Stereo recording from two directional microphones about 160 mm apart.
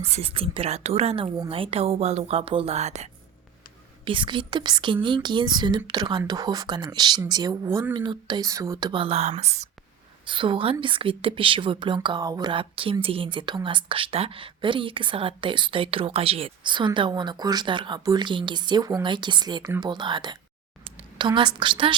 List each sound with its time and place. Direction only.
0.0 s speech: 40° right (ahead or behind)
4.0 s speech: 30° right (ahead or behind)
8.9 s speech: 35° right (ahead or behind)
10.2 s a woman's voice: 30° right (ahead or behind)